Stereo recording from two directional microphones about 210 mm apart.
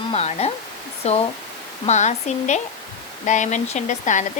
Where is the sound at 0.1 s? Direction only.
30° left (ahead or behind).